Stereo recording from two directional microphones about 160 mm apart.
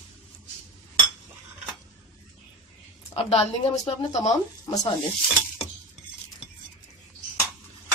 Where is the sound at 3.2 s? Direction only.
40° left (ahead or behind).